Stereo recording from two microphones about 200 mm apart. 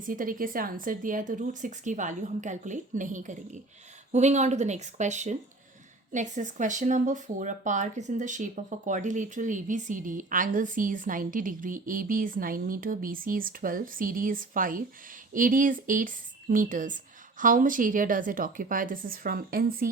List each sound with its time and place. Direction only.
0.1 s speech: 45° right (ahead or behind)